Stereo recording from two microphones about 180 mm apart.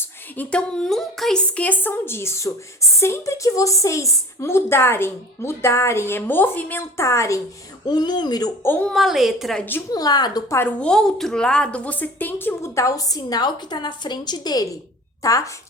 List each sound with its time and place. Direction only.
0.0 s a woman's voice: 10° left (ahead or behind)
8.7 s a woman's voice: 5° left (ahead or behind)
9.9 s speech: 20° left (ahead or behind)
10.8 s a woman's voice: 5° left (ahead or behind)